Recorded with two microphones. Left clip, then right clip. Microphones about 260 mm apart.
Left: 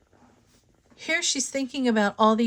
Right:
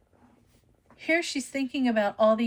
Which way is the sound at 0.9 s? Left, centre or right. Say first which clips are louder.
Left 1 dB; left.